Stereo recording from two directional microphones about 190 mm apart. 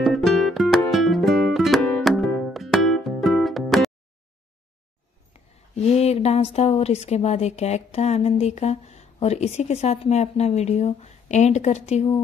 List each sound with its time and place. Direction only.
0.0 s music: centre (ahead or behind)
5.8 s speech: 35° left (ahead or behind)